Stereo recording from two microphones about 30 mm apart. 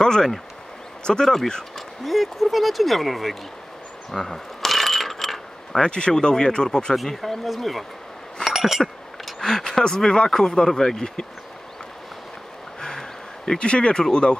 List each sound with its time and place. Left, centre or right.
0.0 s a sound: left
1.0 s speech: left
2.0 s speech: centre
4.1 s speech: centre
4.6 s coin: centre
5.8 s speech: left
7.2 s speech: centre
8.5 s a sound: centre
9.4 s speech: centre
13.6 s speech: left